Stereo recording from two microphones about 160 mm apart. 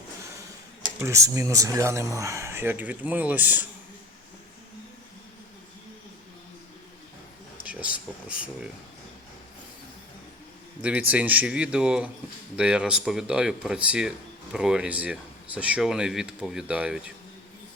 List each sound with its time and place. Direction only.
0.9 s speech: 15° right (ahead or behind)
7.6 s speech: 10° right (ahead or behind)
10.8 s speech: 10° right (ahead or behind)